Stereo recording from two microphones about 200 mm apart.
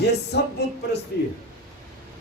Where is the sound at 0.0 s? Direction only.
55° left (ahead or behind).